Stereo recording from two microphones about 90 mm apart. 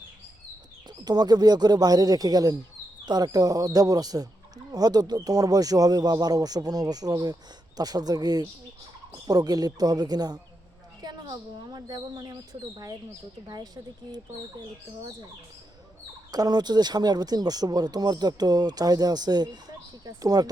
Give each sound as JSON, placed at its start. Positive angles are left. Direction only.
{"t": 0.9, "sound": "a woman's voice", "side_deg": -50}
{"t": 16.3, "sound": "speech", "side_deg": -50}